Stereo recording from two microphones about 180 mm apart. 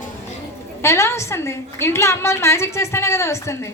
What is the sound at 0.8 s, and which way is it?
A woman's voice, 15° left (ahead or behind).